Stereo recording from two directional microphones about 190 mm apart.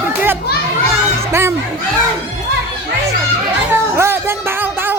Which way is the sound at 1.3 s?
15° right (ahead or behind).